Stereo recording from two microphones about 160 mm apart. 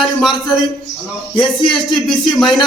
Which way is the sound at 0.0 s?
Centre (ahead or behind).